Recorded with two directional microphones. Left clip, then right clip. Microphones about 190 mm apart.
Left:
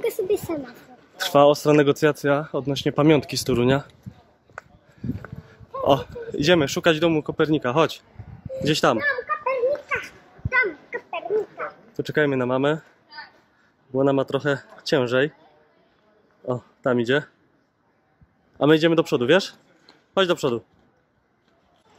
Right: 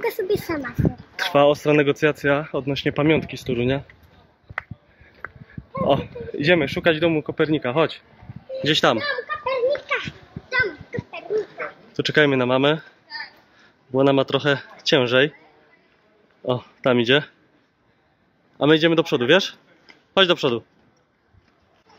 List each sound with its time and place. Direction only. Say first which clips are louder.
0.0 s a man's voice: right 1 dB; centre (ahead or behind)
1.1 s speech: left 1 dB; 15° left (ahead or behind)
3.1 s speech: left 2 dB; 30° left (ahead or behind)
5.9 s speech: left 1 dB; 20° left (ahead or behind)
9.7 s children playing: right 2 dB; 20° left (ahead or behind)
11.9 s a man's voice: right 4 dB; 10° right (ahead or behind)
13.9 s a man's voice: right 3 dB; 5° right (ahead or behind)
16.4 s speech: right 3 dB; 5° right (ahead or behind)
18.6 s a man's voice: right 1 dB; 5° left (ahead or behind)